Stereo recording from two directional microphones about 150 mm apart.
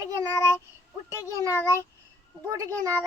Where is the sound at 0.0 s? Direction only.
25° right (ahead or behind).